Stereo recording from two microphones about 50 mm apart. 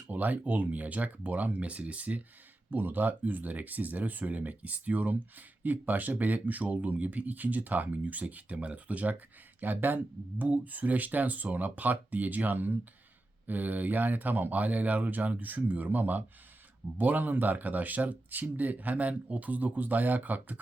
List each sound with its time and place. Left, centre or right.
0.1 s speech: right
2.6 s speech: right